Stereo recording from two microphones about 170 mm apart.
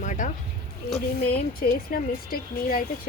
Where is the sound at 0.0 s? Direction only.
50° left (ahead or behind).